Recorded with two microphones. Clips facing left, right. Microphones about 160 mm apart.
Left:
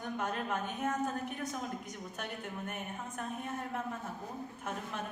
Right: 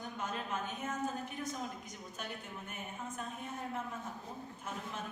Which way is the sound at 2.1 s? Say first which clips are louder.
Left 3 dB; 60° left (ahead or behind).